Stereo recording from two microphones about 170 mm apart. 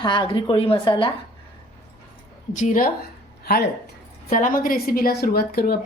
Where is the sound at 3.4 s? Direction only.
65° left (ahead or behind).